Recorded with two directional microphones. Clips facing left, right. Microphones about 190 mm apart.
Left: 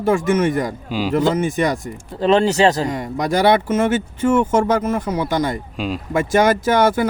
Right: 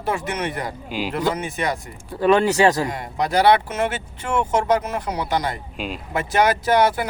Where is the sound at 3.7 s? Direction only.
50° left (ahead or behind).